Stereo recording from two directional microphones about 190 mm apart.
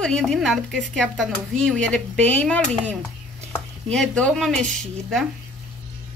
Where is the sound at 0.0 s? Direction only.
5° left (ahead or behind).